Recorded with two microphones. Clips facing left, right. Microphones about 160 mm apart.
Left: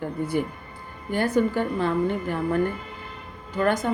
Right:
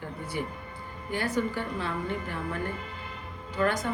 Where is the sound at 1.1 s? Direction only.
50° left (ahead or behind).